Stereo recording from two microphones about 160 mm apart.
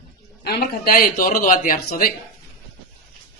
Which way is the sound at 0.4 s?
65° left (ahead or behind).